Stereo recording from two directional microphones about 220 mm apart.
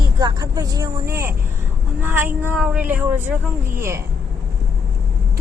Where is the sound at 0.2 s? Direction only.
15° right (ahead or behind).